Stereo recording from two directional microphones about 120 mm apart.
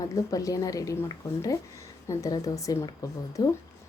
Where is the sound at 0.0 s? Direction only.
30° left (ahead or behind).